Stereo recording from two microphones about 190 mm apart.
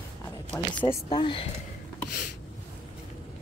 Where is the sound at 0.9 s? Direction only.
25° left (ahead or behind).